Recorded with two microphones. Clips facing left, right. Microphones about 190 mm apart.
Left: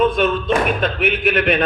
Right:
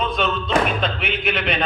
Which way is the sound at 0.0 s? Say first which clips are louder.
Left 6 dB; 50° left (ahead or behind).